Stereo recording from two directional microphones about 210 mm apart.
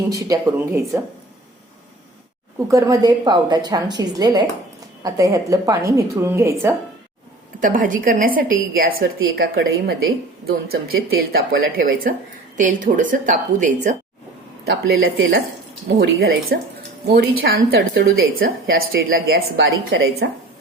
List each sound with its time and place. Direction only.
0.1 s a woman's voice: 15° right (ahead or behind)
2.6 s a woman's voice: 15° right (ahead or behind)
7.6 s a woman's voice: 40° right (ahead or behind)
11.2 s a woman's voice: 45° right (ahead or behind)
14.7 s a woman's voice: 50° right (ahead or behind)